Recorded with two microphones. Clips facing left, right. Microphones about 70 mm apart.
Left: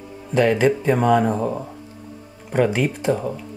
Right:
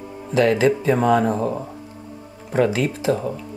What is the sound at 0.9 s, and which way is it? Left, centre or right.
Speech, centre.